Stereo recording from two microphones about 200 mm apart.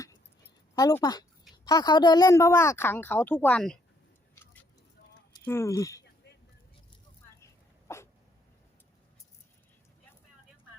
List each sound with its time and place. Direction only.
0.8 s a woman's voice: 20° left (ahead or behind)
5.5 s a woman's voice: 15° left (ahead or behind)
7.9 s dog: 15° left (ahead or behind)